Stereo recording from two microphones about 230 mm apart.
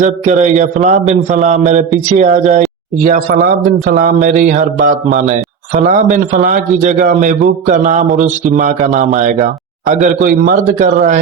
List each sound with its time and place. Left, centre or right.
0.0 s a man's voice: right